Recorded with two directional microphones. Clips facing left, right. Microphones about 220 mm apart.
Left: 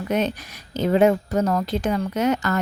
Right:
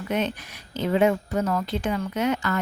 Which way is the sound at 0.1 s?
40° left (ahead or behind).